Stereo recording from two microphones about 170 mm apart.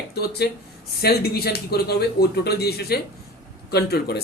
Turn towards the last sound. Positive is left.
turn(degrees=70)  # may be behind; listen again after turning